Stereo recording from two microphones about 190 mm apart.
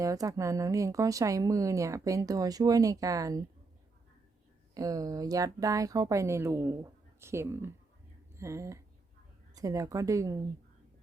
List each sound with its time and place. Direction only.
0.0 s a woman's voice: 15° right (ahead or behind)
4.7 s a woman's voice: 20° right (ahead or behind)